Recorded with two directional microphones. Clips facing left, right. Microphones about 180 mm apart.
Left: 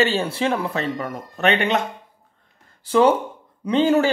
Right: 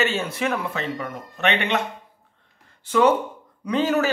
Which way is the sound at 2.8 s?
30° left (ahead or behind).